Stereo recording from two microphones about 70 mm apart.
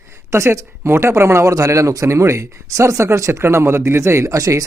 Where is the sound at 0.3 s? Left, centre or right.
Right.